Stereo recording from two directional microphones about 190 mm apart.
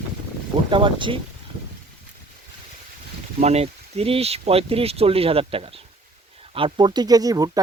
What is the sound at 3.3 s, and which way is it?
Speech, 35° right (ahead or behind).